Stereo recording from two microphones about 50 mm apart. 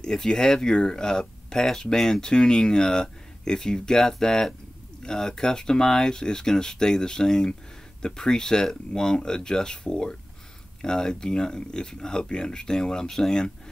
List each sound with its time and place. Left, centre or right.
0.0 s speech: centre